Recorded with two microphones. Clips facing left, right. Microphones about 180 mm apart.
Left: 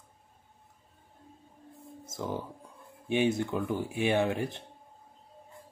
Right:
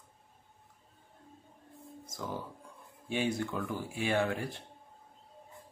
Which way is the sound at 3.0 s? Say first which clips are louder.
Left 5 dB; 20° left (ahead or behind).